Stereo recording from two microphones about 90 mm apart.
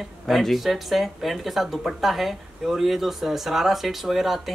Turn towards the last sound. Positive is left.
turn(degrees=0)  # may be behind; listen again after turning